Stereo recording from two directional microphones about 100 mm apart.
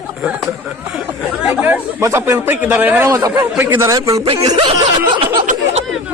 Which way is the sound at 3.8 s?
35° right (ahead or behind).